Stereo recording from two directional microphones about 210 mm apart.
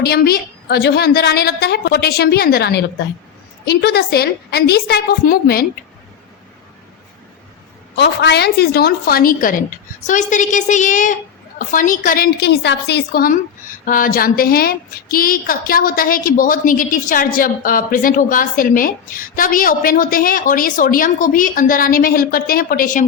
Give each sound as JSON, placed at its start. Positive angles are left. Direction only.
{"t": 0.0, "sound": "a woman's voice", "side_deg": 50}
{"t": 7.9, "sound": "a woman's voice", "side_deg": 55}